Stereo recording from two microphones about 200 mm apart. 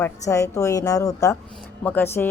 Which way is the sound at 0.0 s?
15° left (ahead or behind).